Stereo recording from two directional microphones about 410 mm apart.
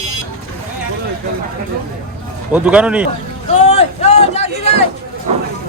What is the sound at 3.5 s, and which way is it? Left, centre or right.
Speech, centre.